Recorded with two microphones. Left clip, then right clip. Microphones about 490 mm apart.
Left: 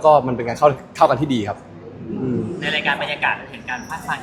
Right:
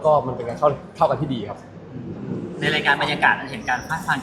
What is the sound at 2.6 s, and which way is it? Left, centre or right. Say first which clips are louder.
A man's voice: right 2 dB; right.